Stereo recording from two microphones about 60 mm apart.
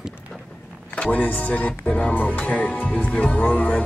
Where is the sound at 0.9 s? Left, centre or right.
Left.